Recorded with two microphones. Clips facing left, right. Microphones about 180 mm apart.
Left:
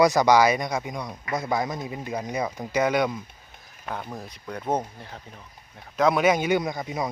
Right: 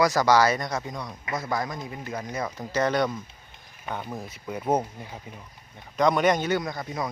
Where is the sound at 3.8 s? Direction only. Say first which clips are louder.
Even; centre (ahead or behind).